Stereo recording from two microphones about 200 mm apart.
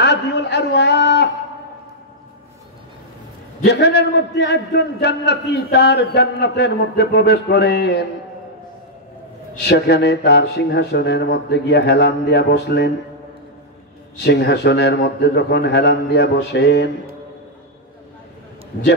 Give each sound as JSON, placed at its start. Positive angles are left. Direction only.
{"t": 0.0, "sound": "a sound", "side_deg": 55}
{"t": 3.6, "sound": "a man's voice", "side_deg": 55}
{"t": 9.6, "sound": "a man's voice", "side_deg": 55}
{"t": 14.1, "sound": "a man's voice", "side_deg": 55}